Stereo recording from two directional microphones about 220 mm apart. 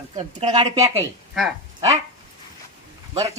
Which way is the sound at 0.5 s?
15° right (ahead or behind).